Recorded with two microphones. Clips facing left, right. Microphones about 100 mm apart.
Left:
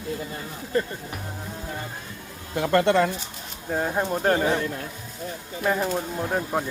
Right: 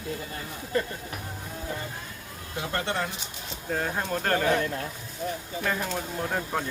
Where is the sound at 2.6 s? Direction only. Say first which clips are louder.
Left 10 dB; 75° left (ahead or behind).